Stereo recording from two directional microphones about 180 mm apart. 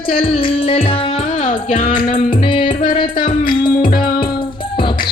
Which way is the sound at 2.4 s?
30° left (ahead or behind).